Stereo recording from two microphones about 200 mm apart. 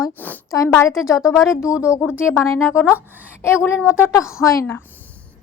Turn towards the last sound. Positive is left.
turn(degrees=15)  # may be behind; listen again after turning